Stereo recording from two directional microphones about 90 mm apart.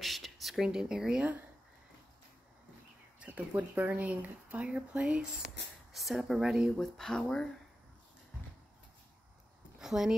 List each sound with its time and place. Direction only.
0.0 s speech: centre (ahead or behind)
3.2 s speech: 15° right (ahead or behind)
5.9 s speech: centre (ahead or behind)
6.8 s speech: 5° left (ahead or behind)
9.8 s a sound: 5° right (ahead or behind)